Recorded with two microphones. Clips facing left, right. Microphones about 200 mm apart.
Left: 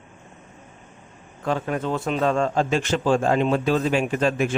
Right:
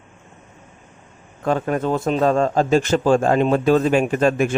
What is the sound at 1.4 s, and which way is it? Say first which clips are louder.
A man's voice: right 4 dB; 50° right (ahead or behind).